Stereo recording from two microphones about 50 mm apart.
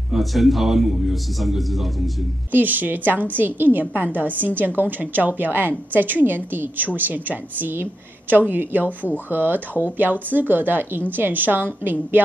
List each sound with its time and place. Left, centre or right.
0.1 s a man's voice: centre
2.5 s a woman's voice: right